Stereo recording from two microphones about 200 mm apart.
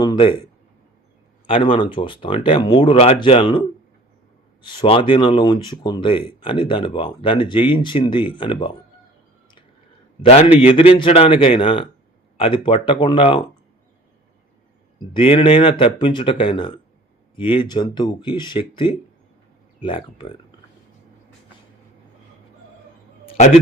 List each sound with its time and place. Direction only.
0.0 s a sound: 25° left (ahead or behind)
1.5 s speech: 25° left (ahead or behind)
4.6 s speech: 25° left (ahead or behind)
10.2 s speech: 30° left (ahead or behind)
14.9 s speech: 25° left (ahead or behind)